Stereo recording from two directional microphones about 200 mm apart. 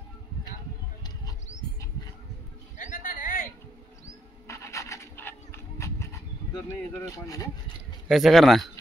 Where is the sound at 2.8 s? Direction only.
40° left (ahead or behind).